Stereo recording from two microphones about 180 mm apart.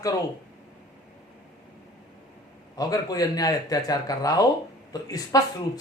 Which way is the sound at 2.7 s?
20° left (ahead or behind).